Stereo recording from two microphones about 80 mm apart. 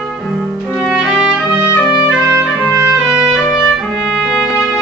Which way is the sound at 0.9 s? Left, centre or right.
Centre.